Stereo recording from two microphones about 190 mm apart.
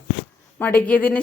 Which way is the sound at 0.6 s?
10° left (ahead or behind).